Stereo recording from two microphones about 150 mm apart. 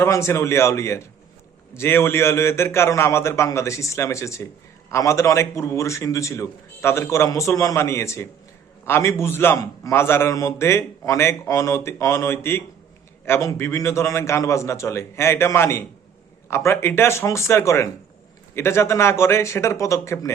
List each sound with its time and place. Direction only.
0.0 s a man's voice: 20° left (ahead or behind)